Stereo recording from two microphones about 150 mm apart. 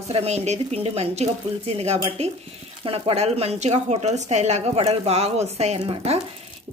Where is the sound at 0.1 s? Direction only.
45° right (ahead or behind).